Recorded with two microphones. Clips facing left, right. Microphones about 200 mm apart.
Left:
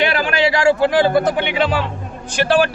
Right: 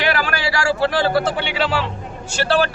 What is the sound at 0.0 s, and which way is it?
A man's voice, 20° left (ahead or behind).